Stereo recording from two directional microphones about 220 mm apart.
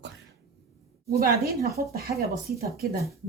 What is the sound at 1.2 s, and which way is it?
Speech, 45° right (ahead or behind).